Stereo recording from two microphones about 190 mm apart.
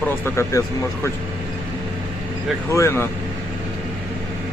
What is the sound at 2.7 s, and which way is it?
Speech, 15° left (ahead or behind).